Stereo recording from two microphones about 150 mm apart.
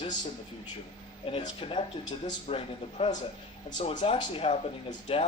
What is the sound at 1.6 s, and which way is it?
Speech, 35° left (ahead or behind).